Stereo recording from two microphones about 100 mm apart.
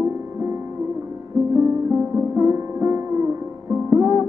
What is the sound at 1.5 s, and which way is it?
Music, 25° right (ahead or behind).